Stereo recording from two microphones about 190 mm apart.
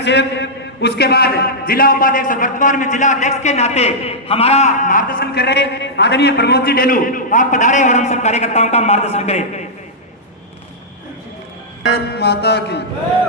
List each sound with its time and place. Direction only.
0.0 s a man's voice: 65° left (ahead or behind); by 9.4 s 35° left (ahead or behind)
11.9 s mantra: 60° left (ahead or behind)